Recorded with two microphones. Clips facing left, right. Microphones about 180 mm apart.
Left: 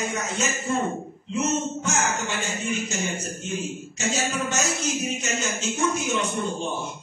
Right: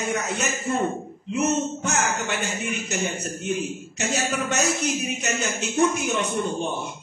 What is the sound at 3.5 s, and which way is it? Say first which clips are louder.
Speech: right 2 dB; 60° right (ahead or behind).